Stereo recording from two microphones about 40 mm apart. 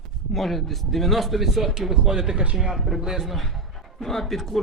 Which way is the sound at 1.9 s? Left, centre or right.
Centre.